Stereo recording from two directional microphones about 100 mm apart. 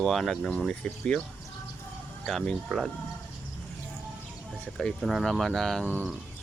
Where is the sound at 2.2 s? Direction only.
5° left (ahead or behind).